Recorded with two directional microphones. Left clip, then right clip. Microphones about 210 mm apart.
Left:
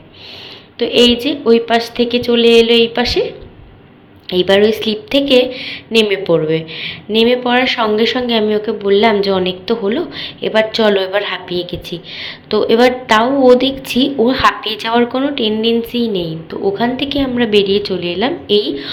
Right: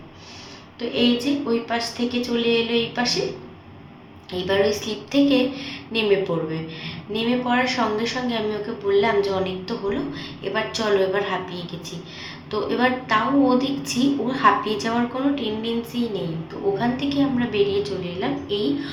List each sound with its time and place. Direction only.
0.8 s a woman's voice: 40° left (ahead or behind)
4.3 s a woman's voice: 40° left (ahead or behind)